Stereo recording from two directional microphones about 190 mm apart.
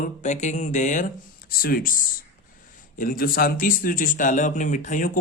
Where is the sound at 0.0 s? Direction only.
40° left (ahead or behind).